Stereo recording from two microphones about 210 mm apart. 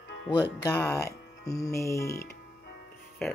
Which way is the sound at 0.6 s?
10° left (ahead or behind).